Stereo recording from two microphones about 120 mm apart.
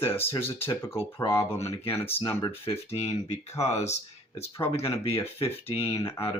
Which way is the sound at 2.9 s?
65° left (ahead or behind).